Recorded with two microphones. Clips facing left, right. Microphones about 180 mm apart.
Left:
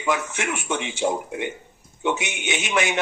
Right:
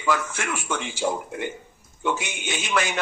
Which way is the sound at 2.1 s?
70° left (ahead or behind).